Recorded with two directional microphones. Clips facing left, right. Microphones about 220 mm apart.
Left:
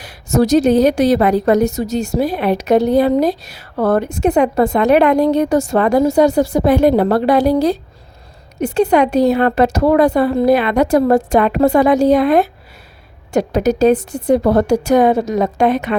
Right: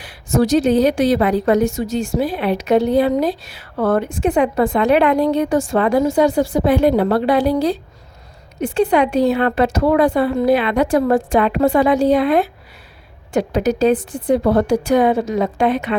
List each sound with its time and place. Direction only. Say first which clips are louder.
0.0 s a woman's voice: left 2 dB; 40° left (ahead or behind)